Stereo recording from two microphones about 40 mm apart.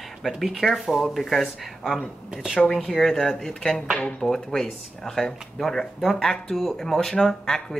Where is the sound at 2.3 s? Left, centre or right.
Centre.